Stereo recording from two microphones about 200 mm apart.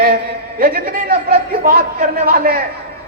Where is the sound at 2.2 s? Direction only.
50° right (ahead or behind).